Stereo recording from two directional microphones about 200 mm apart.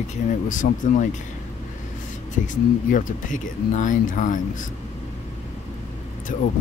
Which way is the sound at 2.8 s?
40° left (ahead or behind).